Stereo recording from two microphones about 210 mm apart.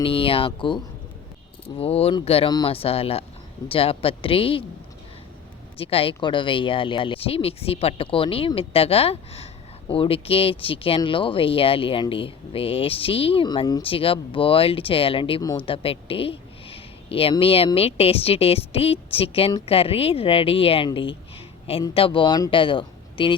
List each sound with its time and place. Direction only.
0.0 s speech: 25° left (ahead or behind)
1.8 s speech: 30° left (ahead or behind)
5.7 s speech: 25° left (ahead or behind)